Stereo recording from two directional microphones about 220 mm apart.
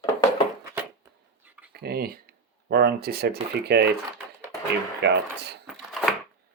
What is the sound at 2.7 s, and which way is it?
Speech, 45° right (ahead or behind).